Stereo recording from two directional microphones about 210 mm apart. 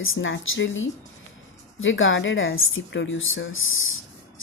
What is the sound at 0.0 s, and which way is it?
A woman's voice, 70° left (ahead or behind).